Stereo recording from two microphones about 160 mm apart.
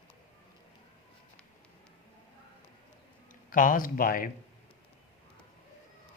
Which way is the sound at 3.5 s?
55° left (ahead or behind).